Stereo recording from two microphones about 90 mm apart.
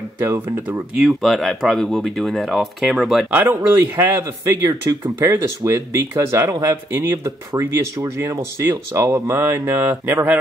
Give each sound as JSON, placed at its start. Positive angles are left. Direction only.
{"t": 0.9, "sound": "speech", "side_deg": 0}
{"t": 3.3, "sound": "speech", "side_deg": -20}
{"t": 4.0, "sound": "speech", "side_deg": -35}